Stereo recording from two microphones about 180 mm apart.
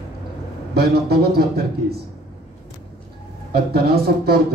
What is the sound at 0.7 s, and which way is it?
Speech, 60° right (ahead or behind).